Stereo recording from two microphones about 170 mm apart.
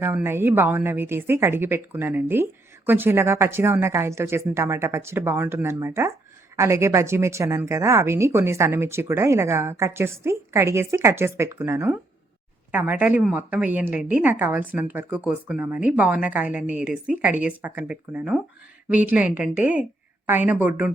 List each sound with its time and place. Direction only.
0.0 s a woman's voice: 15° right (ahead or behind)